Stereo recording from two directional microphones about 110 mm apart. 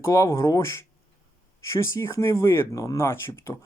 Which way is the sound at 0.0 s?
25° left (ahead or behind).